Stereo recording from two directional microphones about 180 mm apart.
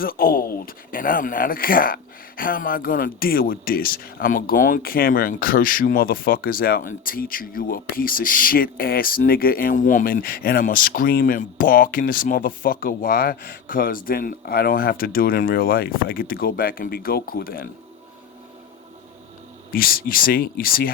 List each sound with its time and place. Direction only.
0.0 s speech: 55° left (ahead or behind)
19.7 s speech: 55° left (ahead or behind)